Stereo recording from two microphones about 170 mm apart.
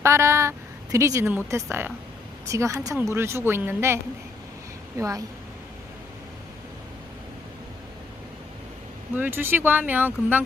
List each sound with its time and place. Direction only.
0.0 s a woman's voice: 15° right (ahead or behind)
2.5 s a woman's voice: 20° right (ahead or behind)
9.1 s speech: 10° right (ahead or behind)